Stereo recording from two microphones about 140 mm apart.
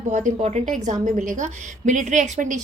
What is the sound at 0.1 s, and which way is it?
A woman's voice, 55° right (ahead or behind).